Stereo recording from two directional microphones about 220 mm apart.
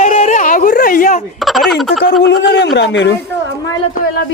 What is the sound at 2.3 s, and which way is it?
Speech, 50° left (ahead or behind).